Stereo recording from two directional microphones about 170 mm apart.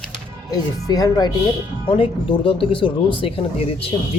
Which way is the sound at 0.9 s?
20° left (ahead or behind).